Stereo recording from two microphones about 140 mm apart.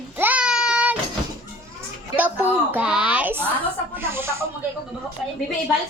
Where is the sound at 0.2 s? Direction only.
10° right (ahead or behind).